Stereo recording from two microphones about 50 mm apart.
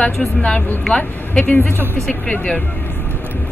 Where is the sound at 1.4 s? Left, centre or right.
Left.